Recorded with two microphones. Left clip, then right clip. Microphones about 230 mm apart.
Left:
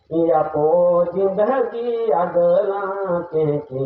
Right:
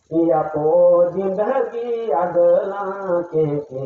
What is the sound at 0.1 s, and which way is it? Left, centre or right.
Mantra, left.